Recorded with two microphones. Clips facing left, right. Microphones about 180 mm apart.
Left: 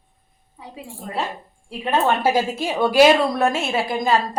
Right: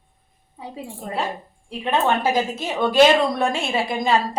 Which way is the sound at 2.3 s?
10° left (ahead or behind).